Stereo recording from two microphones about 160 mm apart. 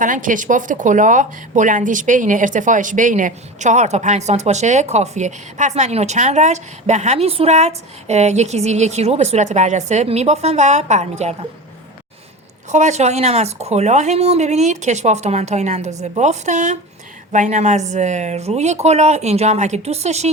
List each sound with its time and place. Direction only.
0.0 s speech: 55° right (ahead or behind)
12.7 s speech: 45° right (ahead or behind)